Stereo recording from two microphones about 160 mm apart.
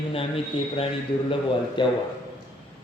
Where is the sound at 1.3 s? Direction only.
30° left (ahead or behind).